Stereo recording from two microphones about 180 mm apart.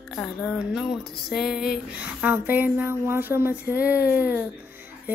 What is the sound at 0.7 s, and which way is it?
Music, 5° right (ahead or behind).